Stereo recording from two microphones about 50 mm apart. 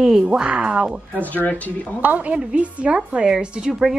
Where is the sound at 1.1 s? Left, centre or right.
Left.